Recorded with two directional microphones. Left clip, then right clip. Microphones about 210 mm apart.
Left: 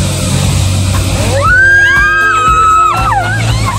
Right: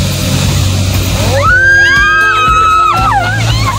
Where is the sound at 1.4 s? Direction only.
20° right (ahead or behind).